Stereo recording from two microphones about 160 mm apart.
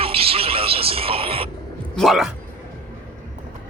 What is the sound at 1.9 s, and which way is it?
Speech, centre (ahead or behind).